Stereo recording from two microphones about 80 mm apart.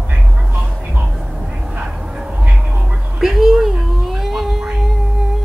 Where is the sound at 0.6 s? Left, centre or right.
Centre.